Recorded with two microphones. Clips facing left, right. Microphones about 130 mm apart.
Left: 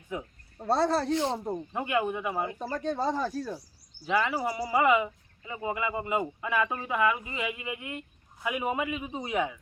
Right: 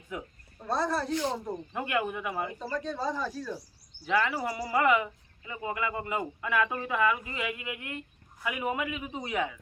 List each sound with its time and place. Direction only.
0.8 s speech: 65° left (ahead or behind)
1.1 s speech: 25° left (ahead or behind)
2.6 s speech: 50° left (ahead or behind)
4.1 s speech: 15° left (ahead or behind)